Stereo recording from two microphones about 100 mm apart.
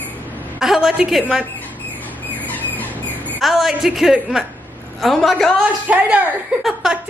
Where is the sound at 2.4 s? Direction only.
15° left (ahead or behind).